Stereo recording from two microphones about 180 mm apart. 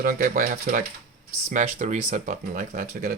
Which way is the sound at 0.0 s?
50° right (ahead or behind).